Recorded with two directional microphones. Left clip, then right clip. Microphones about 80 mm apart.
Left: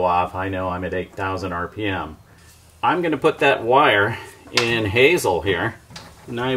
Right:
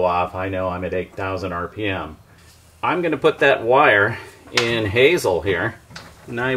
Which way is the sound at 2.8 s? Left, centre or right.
Left.